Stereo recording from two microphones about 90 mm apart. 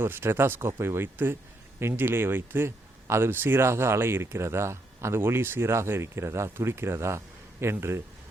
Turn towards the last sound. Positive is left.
turn(degrees=-30)  # may be behind; listen again after turning